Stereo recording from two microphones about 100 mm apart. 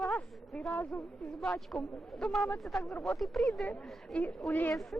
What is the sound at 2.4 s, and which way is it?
Speech, 20° left (ahead or behind).